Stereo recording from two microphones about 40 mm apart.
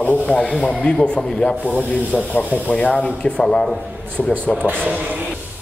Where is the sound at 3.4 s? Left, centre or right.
Centre.